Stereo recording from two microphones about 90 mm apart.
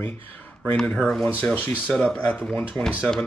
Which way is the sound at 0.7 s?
10° left (ahead or behind).